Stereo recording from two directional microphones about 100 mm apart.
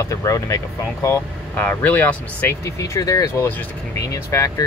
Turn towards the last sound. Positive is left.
turn(degrees=30)  # may be behind; listen again after turning